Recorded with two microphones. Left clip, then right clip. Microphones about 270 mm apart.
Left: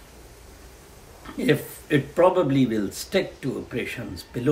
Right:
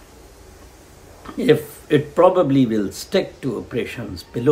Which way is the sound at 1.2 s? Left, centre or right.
Centre.